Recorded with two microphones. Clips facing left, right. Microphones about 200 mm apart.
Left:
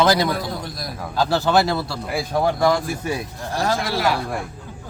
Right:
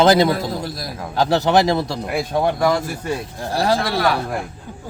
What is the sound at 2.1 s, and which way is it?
Speech, 5° left (ahead or behind).